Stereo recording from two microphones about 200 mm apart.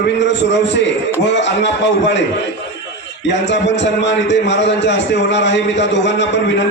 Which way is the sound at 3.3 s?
60° left (ahead or behind).